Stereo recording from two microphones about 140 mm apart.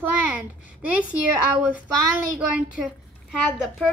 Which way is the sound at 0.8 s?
10° right (ahead or behind).